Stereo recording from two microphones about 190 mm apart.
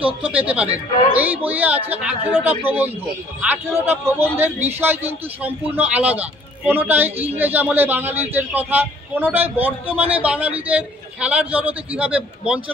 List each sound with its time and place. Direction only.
0.2 s a man's voice: 5° right (ahead or behind)